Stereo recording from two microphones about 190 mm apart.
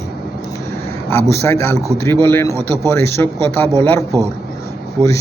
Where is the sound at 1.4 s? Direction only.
15° left (ahead or behind).